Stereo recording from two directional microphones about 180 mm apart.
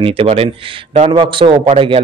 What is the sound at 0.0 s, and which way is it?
Speech, 30° right (ahead or behind).